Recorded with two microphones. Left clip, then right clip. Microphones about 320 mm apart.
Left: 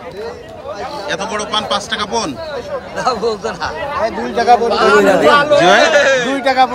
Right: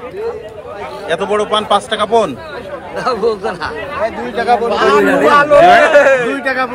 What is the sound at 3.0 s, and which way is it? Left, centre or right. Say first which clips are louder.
Speech: right 2 dB; centre.